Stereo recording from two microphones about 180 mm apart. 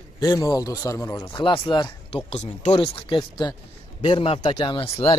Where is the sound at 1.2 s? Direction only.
30° left (ahead or behind).